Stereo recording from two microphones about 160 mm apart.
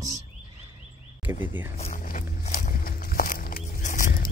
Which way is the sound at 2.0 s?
55° left (ahead or behind).